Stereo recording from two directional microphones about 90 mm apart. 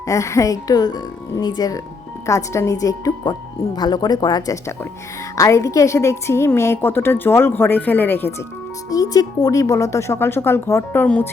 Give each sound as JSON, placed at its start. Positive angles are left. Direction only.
{"t": 0.0, "sound": "speech", "side_deg": 35}
{"t": 2.2, "sound": "speech", "side_deg": 35}
{"t": 5.4, "sound": "a woman's voice", "side_deg": 35}
{"t": 8.9, "sound": "speech", "side_deg": 45}
{"t": 11.0, "sound": "speech", "side_deg": 15}